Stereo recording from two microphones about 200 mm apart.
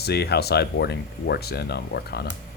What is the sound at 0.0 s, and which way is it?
Speech, 55° left (ahead or behind).